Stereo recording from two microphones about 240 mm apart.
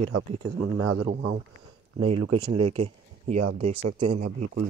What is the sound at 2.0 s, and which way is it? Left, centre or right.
Speech, right.